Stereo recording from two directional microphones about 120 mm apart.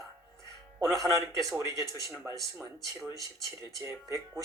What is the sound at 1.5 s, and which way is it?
Speech, 30° right (ahead or behind).